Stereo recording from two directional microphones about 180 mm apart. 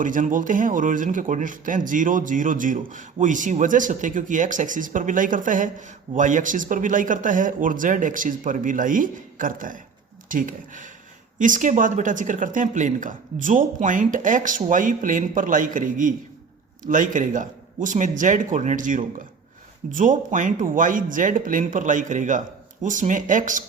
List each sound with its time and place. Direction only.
0.0 s speech: 50° right (ahead or behind)